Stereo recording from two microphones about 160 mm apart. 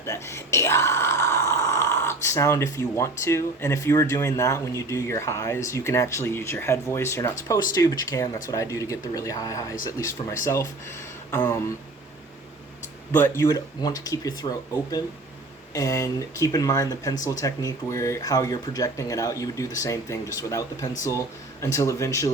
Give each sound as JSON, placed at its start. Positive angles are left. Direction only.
{"t": 0.0, "sound": "speech", "side_deg": 15}
{"t": 13.1, "sound": "speech", "side_deg": 15}
{"t": 15.7, "sound": "speech", "side_deg": 20}